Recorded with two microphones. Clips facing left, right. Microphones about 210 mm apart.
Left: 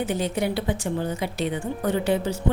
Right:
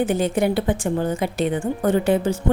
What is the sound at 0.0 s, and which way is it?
A woman's voice, 50° right (ahead or behind).